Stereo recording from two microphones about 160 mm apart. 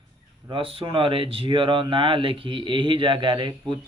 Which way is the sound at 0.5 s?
35° right (ahead or behind).